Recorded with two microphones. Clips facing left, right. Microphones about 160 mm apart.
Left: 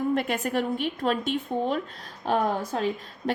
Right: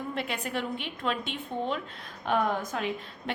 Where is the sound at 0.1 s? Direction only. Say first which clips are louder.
Left 7 dB; 45° left (ahead or behind).